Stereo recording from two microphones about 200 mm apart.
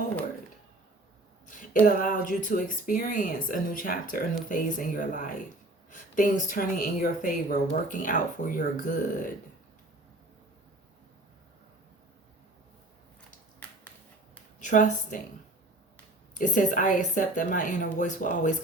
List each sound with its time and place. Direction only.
1.8 s a woman's voice: 40° left (ahead or behind)
14.6 s speech: 40° left (ahead or behind)
16.3 s a woman's voice: 40° left (ahead or behind)